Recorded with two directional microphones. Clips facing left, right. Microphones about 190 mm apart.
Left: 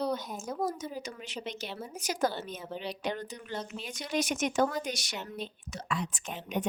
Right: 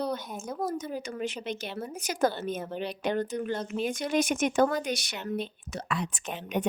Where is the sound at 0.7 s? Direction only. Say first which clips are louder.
Right 5 dB; 55° right (ahead or behind).